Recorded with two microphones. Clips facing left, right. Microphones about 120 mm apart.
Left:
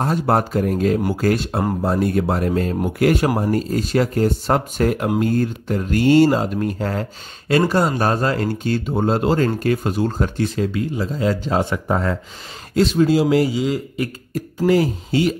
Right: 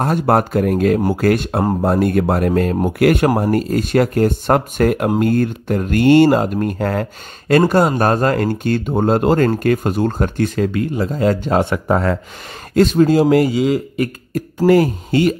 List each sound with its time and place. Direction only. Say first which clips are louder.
0.0 s speech: right 3 dB; 60° right (ahead or behind)
3.3 s speech: right 4 dB; 55° right (ahead or behind); by 12.2 s 70° right (ahead or behind)
12.7 s a man's voice: right 4 dB; 50° right (ahead or behind)